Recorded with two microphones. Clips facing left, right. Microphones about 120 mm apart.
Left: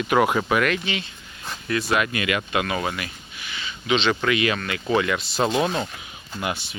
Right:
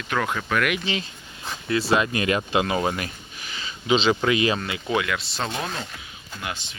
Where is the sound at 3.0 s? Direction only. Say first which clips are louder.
Right 1 dB; 40° right (ahead or behind); by 4.8 s 20° right (ahead or behind).